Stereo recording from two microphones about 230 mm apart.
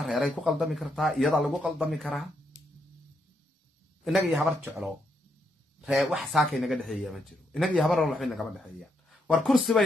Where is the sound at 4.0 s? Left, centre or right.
Centre.